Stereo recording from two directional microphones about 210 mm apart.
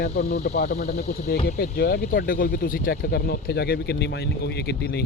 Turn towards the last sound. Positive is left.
turn(degrees=50)  # may be behind; listen again after turning